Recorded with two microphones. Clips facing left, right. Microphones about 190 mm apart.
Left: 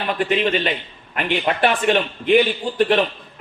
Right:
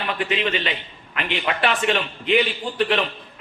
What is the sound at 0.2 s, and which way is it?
A man's voice, 45° left (ahead or behind).